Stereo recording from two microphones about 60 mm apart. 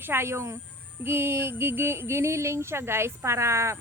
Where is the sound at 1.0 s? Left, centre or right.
Right.